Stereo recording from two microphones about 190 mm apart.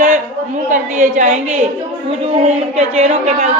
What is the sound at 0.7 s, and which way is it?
Speech, 40° right (ahead or behind).